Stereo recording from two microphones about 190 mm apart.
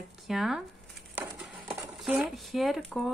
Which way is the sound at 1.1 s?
5° right (ahead or behind).